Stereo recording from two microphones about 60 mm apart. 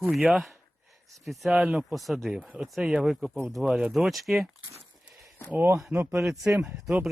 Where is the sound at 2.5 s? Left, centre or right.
Centre.